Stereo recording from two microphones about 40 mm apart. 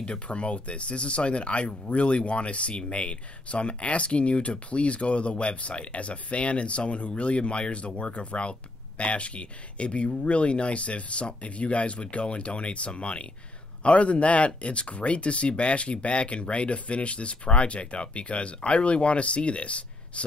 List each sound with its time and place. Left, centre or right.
0.0 s speech: left